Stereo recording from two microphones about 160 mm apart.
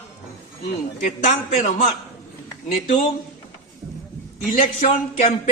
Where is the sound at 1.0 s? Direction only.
50° left (ahead or behind).